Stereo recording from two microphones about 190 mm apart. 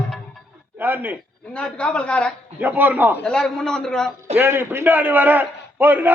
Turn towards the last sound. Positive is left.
turn(degrees=-10)  # may be behind; listen again after turning